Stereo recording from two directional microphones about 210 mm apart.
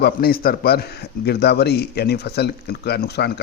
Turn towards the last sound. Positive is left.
turn(degrees=50)  # may be behind; listen again after turning